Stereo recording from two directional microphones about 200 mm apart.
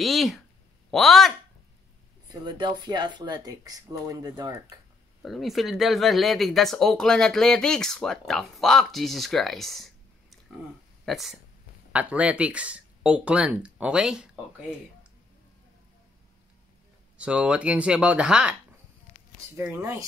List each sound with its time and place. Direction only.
0.0 s speech: centre (ahead or behind)
2.4 s speech: 25° right (ahead or behind)
5.2 s speech: centre (ahead or behind)
11.1 s speech: centre (ahead or behind)
17.2 s speech: 5° right (ahead or behind)